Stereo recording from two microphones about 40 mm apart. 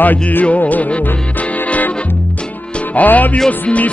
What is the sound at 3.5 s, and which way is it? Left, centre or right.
Music, left.